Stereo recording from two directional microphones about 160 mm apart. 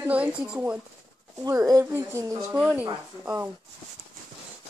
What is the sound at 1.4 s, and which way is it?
Speech, 20° right (ahead or behind).